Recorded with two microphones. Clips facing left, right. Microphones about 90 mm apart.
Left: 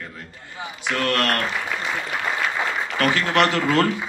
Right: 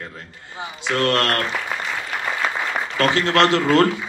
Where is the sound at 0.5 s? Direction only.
25° right (ahead or behind).